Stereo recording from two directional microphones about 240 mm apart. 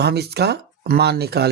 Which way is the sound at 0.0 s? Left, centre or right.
Right.